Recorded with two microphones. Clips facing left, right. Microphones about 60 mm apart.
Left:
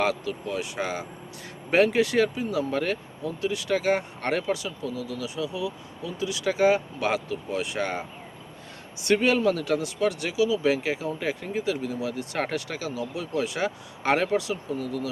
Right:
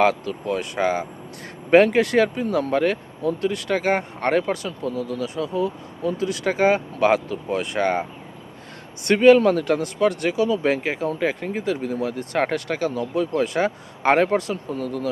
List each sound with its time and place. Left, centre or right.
0.0 s speech: right
9.0 s speech: right